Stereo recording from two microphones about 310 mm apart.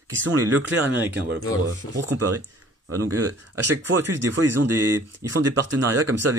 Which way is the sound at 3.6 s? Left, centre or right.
Right.